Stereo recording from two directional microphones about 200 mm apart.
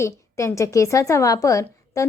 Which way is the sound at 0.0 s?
15° left (ahead or behind).